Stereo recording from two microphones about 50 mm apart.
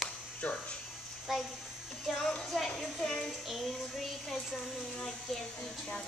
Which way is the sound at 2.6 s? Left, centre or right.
Centre.